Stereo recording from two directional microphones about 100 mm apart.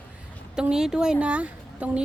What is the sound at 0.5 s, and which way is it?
A woman's voice, 5° right (ahead or behind).